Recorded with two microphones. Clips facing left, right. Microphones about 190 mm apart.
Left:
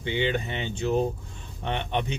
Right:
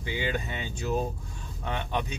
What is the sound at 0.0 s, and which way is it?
Speech, 25° left (ahead or behind).